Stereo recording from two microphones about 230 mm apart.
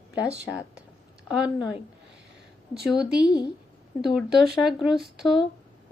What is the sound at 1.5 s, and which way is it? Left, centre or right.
Speech, centre.